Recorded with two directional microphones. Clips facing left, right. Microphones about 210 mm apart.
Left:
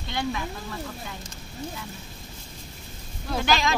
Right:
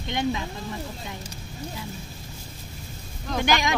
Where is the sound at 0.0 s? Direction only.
20° right (ahead or behind).